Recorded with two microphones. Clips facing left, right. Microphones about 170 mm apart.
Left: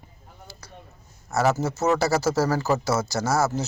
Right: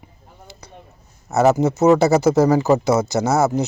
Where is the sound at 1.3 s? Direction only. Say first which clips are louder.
Right 7 dB; 20° right (ahead or behind).